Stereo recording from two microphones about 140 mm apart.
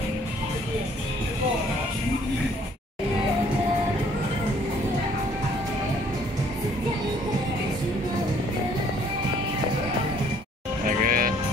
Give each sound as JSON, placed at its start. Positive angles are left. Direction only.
{"t": 11.1, "sound": "music", "side_deg": -90}